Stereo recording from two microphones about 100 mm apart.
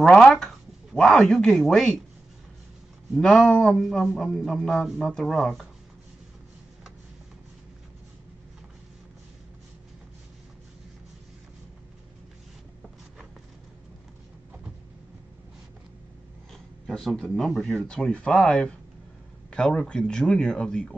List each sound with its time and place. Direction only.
0.0 s a woman's voice: 5° left (ahead or behind)
3.2 s speech: 5° left (ahead or behind)
16.8 s speech: 5° left (ahead or behind)